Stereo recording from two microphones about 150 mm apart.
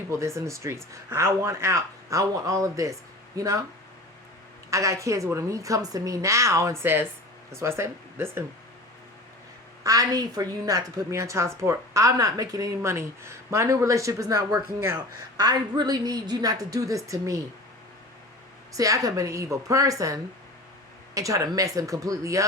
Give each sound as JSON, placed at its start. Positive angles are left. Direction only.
{"t": 0.2, "sound": "speech", "side_deg": -20}
{"t": 4.7, "sound": "speech", "side_deg": -20}
{"t": 9.8, "sound": "speech", "side_deg": -25}
{"t": 18.7, "sound": "speech", "side_deg": -25}
{"t": 21.2, "sound": "speech", "side_deg": -20}